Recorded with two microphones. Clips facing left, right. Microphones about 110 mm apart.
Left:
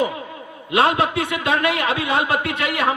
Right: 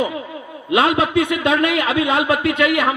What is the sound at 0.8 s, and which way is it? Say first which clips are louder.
A man's voice: right 1 dB; 30° left (ahead or behind).